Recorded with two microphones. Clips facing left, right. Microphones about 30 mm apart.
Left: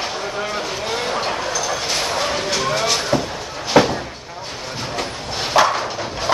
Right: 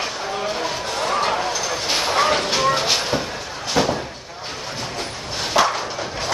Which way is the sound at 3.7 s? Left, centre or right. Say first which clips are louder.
Left 6 dB; left.